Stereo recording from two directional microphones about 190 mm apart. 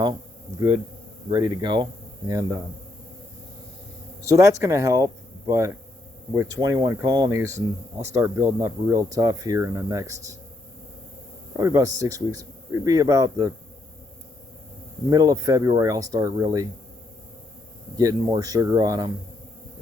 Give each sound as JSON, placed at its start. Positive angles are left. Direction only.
{"t": 1.3, "sound": "speech", "side_deg": -25}
{"t": 4.2, "sound": "speech", "side_deg": -15}
{"t": 11.5, "sound": "speech", "side_deg": -15}
{"t": 15.1, "sound": "speech", "side_deg": -20}
{"t": 17.9, "sound": "speech", "side_deg": -20}